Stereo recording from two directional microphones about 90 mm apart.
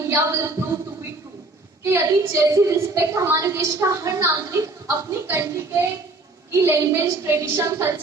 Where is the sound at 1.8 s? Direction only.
30° right (ahead or behind).